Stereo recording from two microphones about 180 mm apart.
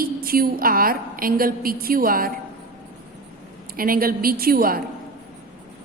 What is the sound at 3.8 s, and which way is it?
A woman's voice, 55° right (ahead or behind).